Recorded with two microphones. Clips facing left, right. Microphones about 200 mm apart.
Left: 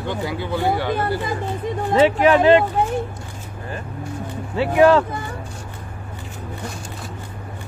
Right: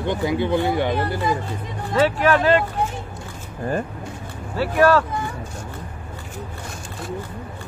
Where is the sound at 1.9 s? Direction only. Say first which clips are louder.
Left 3 dB; 20° left (ahead or behind).